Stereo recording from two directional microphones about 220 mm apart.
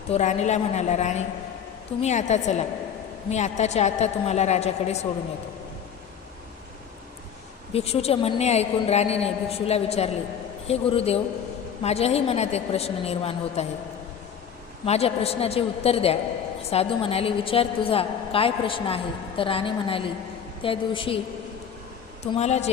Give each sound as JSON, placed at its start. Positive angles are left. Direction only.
{"t": 0.1, "sound": "a woman's voice", "side_deg": 30}
{"t": 7.7, "sound": "a woman's voice", "side_deg": 25}
{"t": 14.8, "sound": "a woman's voice", "side_deg": 30}
{"t": 22.2, "sound": "a woman's voice", "side_deg": 30}